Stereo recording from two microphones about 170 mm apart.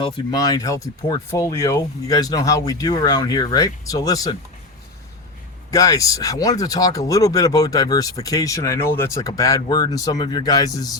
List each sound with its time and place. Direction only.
0.0 s speech: 25° left (ahead or behind)
5.7 s speech: 20° left (ahead or behind)